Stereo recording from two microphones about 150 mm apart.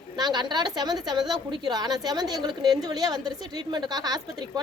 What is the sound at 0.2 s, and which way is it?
A woman's voice, 30° right (ahead or behind).